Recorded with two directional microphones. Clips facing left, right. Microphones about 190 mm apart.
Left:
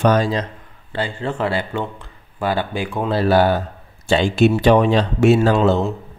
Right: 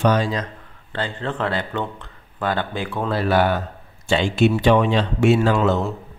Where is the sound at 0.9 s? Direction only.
10° left (ahead or behind).